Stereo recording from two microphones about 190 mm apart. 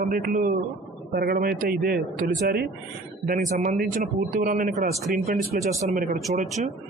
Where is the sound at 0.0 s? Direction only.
50° right (ahead or behind).